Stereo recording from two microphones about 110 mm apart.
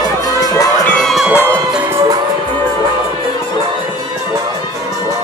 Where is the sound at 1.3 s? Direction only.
20° left (ahead or behind).